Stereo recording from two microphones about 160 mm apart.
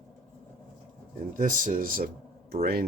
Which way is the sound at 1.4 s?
55° right (ahead or behind).